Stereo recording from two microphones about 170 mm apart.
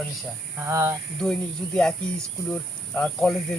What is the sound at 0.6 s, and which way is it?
Speech, 15° right (ahead or behind).